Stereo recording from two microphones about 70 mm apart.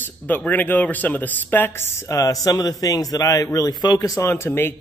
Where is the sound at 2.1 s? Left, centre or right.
Left.